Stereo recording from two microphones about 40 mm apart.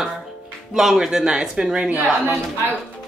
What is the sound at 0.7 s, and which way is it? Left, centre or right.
Speech, centre.